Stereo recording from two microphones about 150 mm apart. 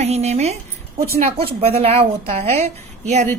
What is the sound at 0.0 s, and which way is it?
A woman's voice, 45° right (ahead or behind).